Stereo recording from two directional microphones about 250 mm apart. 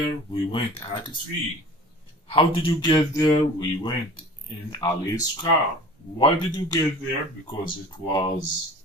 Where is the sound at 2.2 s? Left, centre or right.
Left.